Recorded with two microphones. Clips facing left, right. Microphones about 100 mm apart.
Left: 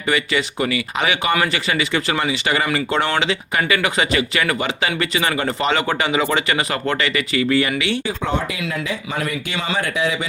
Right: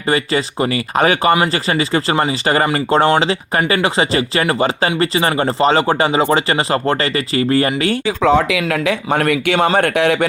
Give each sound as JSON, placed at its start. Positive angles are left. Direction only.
{"t": 0.1, "sound": "speech", "side_deg": -35}
{"t": 8.0, "sound": "speech", "side_deg": -90}